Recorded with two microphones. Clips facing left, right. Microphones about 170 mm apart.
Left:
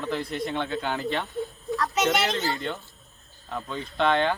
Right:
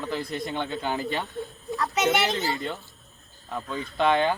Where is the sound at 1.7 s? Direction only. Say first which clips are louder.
Even; 20° right (ahead or behind).